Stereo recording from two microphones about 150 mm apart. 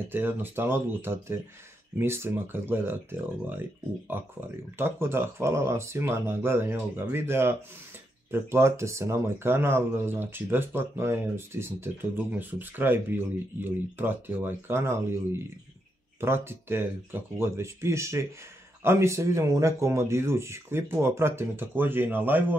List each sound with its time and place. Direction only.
0.1 s speech: 15° right (ahead or behind)